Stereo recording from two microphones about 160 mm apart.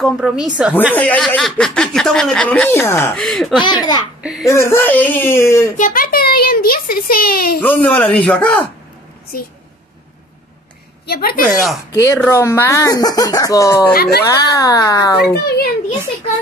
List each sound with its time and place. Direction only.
0.0 s a woman's voice: centre (ahead or behind); by 3.2 s 15° left (ahead or behind)
3.2 s a woman's voice: centre (ahead or behind)
3.6 s speech: 25° left (ahead or behind)
4.2 s speech: 5° right (ahead or behind)
4.5 s speech: 15° left (ahead or behind)
5.8 s a child's voice: 65° left (ahead or behind)
7.6 s speech: 10° left (ahead or behind)
11.1 s a child's voice: 70° left (ahead or behind)
11.4 s a woman's voice: centre (ahead or behind)
11.9 s speech: 15° left (ahead or behind)
15.3 s a child's voice: 75° left (ahead or behind)